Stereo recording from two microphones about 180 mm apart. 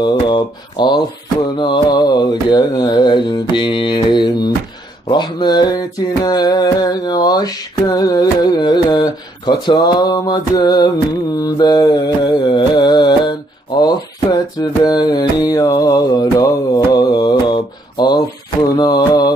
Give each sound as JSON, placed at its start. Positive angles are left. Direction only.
{"t": 0.0, "sound": "mantra", "side_deg": 25}